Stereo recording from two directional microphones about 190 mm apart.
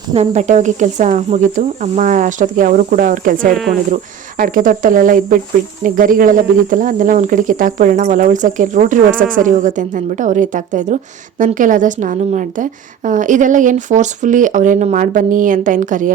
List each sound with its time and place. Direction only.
0.1 s speech: 35° right (ahead or behind)